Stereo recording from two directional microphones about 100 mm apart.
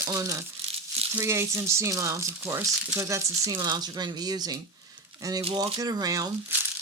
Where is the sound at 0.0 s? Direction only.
35° right (ahead or behind).